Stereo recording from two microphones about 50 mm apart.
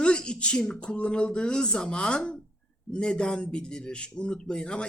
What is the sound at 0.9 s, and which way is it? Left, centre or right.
Speech, left.